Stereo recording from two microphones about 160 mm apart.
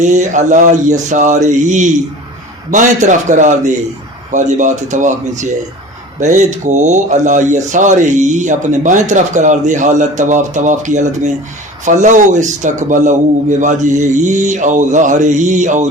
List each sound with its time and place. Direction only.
0.0 s speech: 50° right (ahead or behind)